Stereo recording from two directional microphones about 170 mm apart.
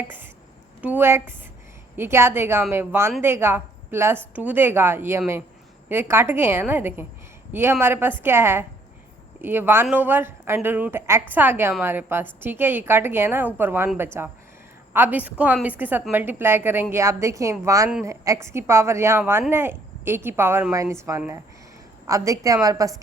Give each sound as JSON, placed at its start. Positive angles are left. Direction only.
{"t": 0.8, "sound": "a woman's voice", "side_deg": -10}